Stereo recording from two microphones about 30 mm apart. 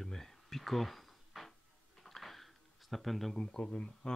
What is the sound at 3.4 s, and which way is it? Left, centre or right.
Speech, left.